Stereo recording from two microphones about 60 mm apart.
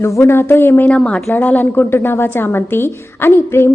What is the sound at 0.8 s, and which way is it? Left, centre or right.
Speech, centre.